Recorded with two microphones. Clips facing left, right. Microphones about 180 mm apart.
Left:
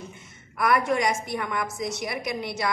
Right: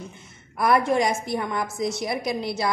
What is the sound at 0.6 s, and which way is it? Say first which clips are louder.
A woman's voice: right 3 dB; 30° right (ahead or behind).